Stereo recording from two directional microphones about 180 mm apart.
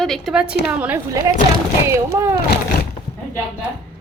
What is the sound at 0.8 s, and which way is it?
A woman's voice, 10° right (ahead or behind).